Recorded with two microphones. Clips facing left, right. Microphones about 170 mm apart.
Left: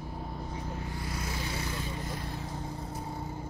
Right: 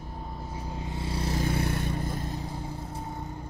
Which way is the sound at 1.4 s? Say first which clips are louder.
Right 7 dB; 55° right (ahead or behind).